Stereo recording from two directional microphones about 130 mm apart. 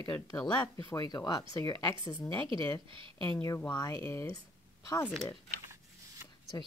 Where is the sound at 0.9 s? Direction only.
30° left (ahead or behind).